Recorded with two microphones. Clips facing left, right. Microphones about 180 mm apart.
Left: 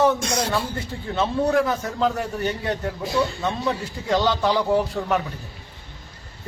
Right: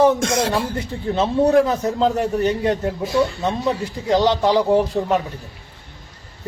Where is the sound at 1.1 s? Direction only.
30° right (ahead or behind).